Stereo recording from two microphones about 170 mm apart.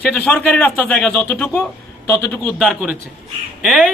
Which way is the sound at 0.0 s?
5° left (ahead or behind).